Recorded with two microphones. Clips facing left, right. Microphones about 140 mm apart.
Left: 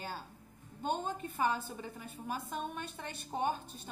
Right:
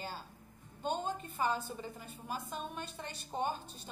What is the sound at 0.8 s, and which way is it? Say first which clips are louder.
Speech: left 1 dB; 55° left (ahead or behind).